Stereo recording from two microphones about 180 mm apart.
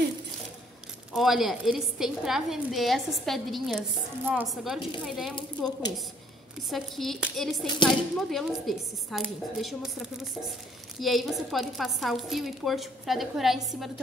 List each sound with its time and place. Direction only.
1.1 s a woman's voice: centre (ahead or behind)
5.7 s a woman's voice: 20° left (ahead or behind)
6.7 s a woman's voice: centre (ahead or behind)